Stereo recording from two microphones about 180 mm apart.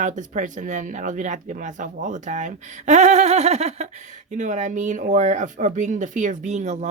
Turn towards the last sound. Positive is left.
turn(degrees=-40)  # may be behind; listen again after turning